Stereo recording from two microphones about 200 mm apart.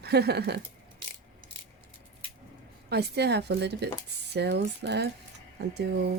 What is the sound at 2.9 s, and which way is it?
Speech, 55° right (ahead or behind).